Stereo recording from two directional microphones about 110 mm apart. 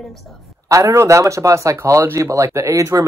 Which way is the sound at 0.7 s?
30° right (ahead or behind).